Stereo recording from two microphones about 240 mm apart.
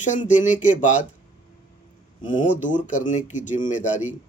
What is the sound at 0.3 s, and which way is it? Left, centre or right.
Speech, left.